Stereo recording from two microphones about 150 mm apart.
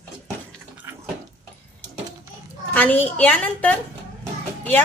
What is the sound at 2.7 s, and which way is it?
A woman's voice, 10° left (ahead or behind).